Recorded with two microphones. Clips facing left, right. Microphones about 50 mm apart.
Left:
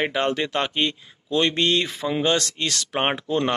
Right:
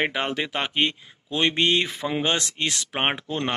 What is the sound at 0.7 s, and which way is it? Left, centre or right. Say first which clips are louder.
Speech: even; right.